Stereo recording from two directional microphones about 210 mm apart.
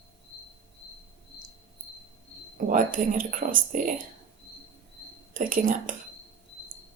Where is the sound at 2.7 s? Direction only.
40° right (ahead or behind).